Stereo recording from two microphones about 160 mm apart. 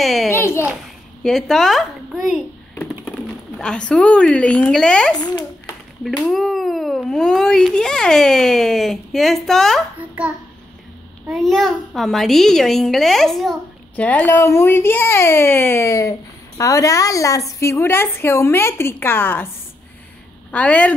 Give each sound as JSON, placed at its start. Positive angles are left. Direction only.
{"t": 0.0, "sound": "a child's voice", "side_deg": 0}
{"t": 0.3, "sound": "a sound", "side_deg": 15}
{"t": 1.2, "sound": "a woman's voice", "side_deg": 0}
{"t": 20.5, "sound": "a child's voice", "side_deg": 10}